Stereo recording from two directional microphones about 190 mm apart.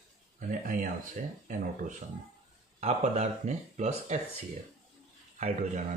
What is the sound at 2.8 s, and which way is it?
Speech, 35° right (ahead or behind).